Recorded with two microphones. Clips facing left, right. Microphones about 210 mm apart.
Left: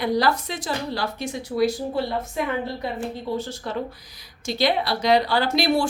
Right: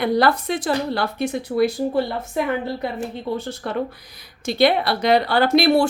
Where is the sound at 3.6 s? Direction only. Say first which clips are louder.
Right 4 dB; 60° right (ahead or behind).